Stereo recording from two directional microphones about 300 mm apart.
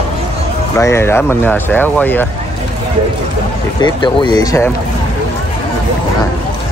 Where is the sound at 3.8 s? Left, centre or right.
Centre.